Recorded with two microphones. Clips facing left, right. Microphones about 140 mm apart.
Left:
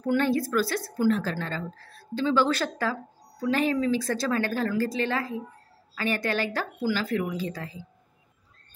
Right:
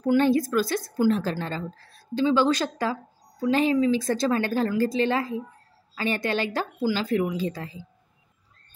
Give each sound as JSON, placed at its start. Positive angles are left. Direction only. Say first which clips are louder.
{"t": 0.0, "sound": "speech", "louder": "right 4 dB", "side_deg": -15}